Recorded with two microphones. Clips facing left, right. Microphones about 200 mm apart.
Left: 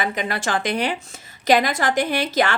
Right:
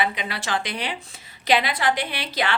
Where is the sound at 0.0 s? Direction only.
45° left (ahead or behind).